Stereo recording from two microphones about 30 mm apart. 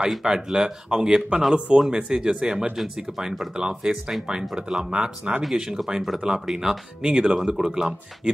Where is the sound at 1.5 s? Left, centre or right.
Right.